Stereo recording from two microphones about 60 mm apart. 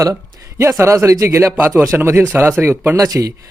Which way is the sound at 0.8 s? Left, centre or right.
Right.